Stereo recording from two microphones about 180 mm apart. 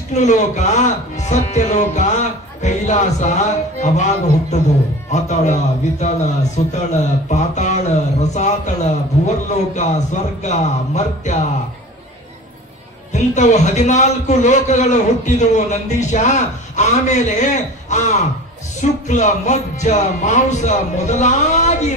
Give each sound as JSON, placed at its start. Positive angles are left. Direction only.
{"t": 0.1, "sound": "a man's voice", "side_deg": 40}
{"t": 9.8, "sound": "a man's voice", "side_deg": 40}
{"t": 13.1, "sound": "a man's voice", "side_deg": 40}